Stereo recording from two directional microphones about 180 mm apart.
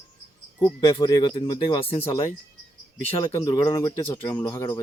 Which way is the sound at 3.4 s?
20° left (ahead or behind).